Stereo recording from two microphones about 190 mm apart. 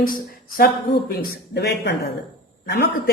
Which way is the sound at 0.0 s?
50° left (ahead or behind).